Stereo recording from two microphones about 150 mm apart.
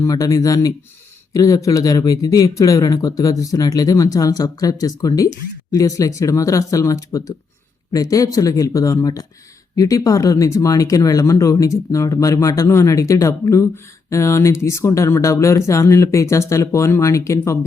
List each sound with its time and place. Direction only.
0.0 s speech: 25° left (ahead or behind)